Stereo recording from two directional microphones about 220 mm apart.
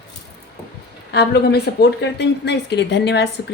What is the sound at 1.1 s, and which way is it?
A woman's voice, 45° left (ahead or behind).